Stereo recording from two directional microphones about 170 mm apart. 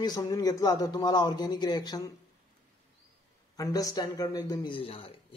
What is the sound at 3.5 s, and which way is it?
Speech, 20° left (ahead or behind).